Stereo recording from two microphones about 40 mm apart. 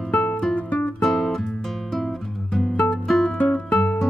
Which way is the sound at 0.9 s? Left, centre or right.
Centre.